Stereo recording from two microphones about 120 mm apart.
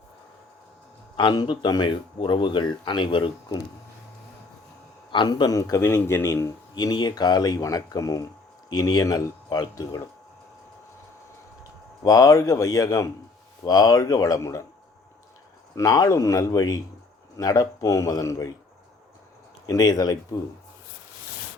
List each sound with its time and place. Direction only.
1.1 s speech: 40° left (ahead or behind)
5.1 s a man's voice: 40° left (ahead or behind)
6.7 s speech: 35° left (ahead or behind)
12.0 s a man's voice: 30° left (ahead or behind)
15.7 s a man's voice: 30° left (ahead or behind)
19.6 s speech: 30° left (ahead or behind)